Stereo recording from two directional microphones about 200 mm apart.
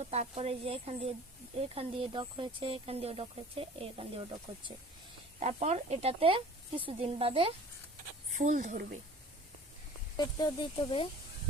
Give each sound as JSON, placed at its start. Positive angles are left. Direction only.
{"t": 0.0, "sound": "speech", "side_deg": -35}
{"t": 5.4, "sound": "speech", "side_deg": -35}
{"t": 8.4, "sound": "speech", "side_deg": -40}
{"t": 10.2, "sound": "speech", "side_deg": 20}